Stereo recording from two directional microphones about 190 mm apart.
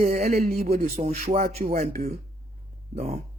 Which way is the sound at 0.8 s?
35° right (ahead or behind).